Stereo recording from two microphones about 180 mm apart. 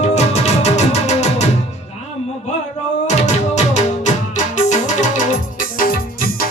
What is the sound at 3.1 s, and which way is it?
Music, 40° left (ahead or behind).